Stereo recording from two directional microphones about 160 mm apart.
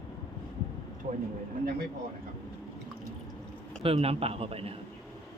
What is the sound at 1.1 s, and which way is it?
Speech, 45° right (ahead or behind).